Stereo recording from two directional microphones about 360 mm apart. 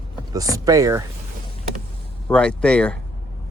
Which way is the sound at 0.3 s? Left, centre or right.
Centre.